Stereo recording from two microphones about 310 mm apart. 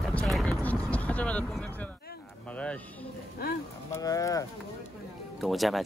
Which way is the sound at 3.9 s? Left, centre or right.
Centre.